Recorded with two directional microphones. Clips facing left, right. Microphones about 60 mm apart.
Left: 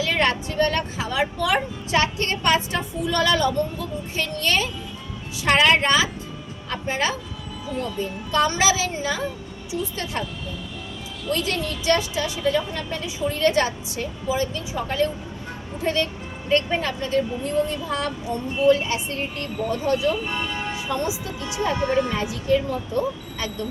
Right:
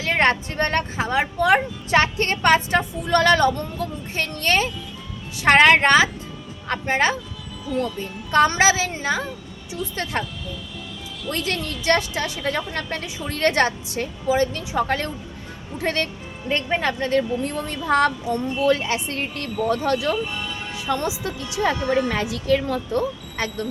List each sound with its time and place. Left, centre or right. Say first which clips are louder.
0.0 s a woman's voice: right 2 dB; right
11.3 s a woman's voice: left 1 dB; right
16.5 s speech: left 2 dB; right
16.8 s a woman's voice: right 2 dB; right
20.2 s speech: left 3 dB; left
20.7 s speech: right 4 dB; right
23.4 s a woman's voice: right 4 dB; right